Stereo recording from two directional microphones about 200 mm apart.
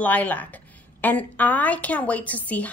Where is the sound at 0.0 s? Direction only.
10° left (ahead or behind).